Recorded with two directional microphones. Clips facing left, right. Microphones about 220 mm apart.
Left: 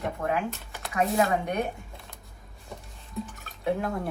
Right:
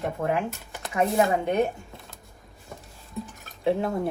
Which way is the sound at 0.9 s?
25° right (ahead or behind).